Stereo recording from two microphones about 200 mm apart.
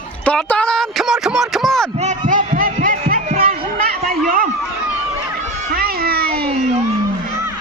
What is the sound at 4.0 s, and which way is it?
Chatter, 45° right (ahead or behind).